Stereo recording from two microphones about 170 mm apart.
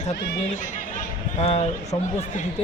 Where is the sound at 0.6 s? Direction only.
45° left (ahead or behind).